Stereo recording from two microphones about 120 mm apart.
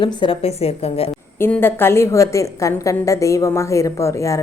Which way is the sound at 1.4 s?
15° left (ahead or behind).